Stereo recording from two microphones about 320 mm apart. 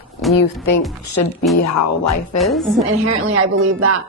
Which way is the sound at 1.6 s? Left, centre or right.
Left.